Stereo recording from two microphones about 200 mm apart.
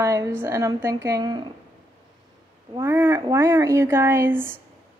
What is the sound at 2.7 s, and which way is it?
Speech, 10° right (ahead or behind).